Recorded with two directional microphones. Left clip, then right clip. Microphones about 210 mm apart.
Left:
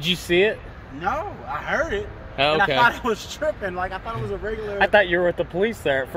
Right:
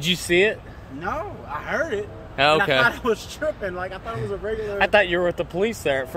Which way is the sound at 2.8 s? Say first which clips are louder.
Left 1 dB; 60° left (ahead or behind).